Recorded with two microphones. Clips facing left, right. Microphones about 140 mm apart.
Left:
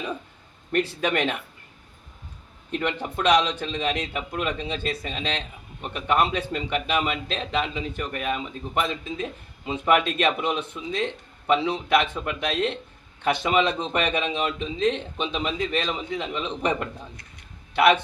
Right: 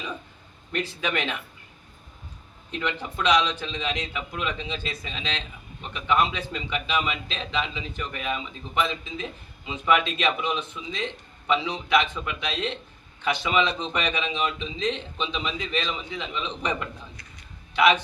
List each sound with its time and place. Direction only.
0.7 s a man's voice: 50° left (ahead or behind)
2.7 s a man's voice: 50° left (ahead or behind)